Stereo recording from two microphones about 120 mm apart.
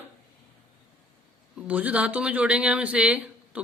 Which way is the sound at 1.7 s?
10° right (ahead or behind).